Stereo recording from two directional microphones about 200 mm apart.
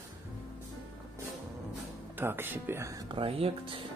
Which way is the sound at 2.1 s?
10° right (ahead or behind).